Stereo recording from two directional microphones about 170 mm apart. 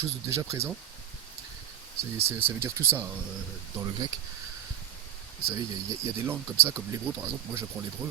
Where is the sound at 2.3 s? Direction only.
15° right (ahead or behind).